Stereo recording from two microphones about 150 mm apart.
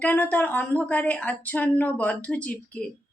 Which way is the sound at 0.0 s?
10° left (ahead or behind).